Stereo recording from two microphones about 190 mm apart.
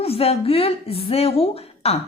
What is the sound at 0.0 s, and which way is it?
A woman's voice, 30° left (ahead or behind).